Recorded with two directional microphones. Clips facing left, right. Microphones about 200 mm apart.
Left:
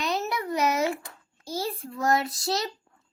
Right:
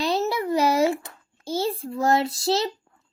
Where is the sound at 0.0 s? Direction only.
30° right (ahead or behind).